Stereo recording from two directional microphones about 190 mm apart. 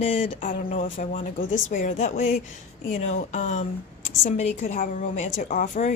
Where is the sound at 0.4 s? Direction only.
40° left (ahead or behind).